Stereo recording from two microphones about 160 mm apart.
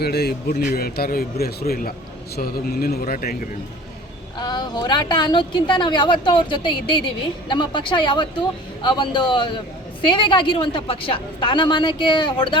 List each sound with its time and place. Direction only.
0.0 s speech: 90° left
0.7 s speech: 70° left (ahead or behind)
4.4 s a woman's voice: 25° left (ahead or behind)